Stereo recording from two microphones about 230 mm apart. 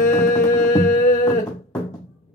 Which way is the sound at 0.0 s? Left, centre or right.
Left.